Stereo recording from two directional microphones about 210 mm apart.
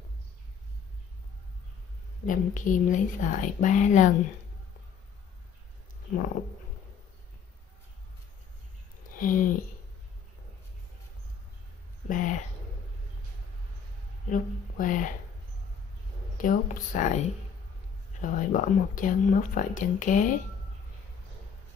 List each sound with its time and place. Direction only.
2.2 s speech: 40° left (ahead or behind)
9.1 s speech: 40° left (ahead or behind)
12.1 s speech: 40° left (ahead or behind)
14.3 s speech: 40° left (ahead or behind)
16.3 s speech: 40° left (ahead or behind)
18.2 s speech: 40° left (ahead or behind)